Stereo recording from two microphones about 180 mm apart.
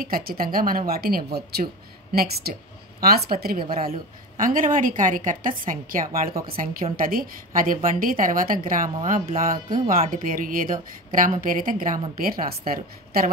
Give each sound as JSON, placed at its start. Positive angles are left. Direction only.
{"t": 0.0, "sound": "a woman's voice", "side_deg": -55}